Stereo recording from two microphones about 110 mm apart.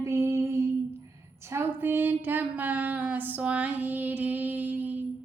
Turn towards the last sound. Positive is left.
turn(degrees=-15)  # may be behind; listen again after turning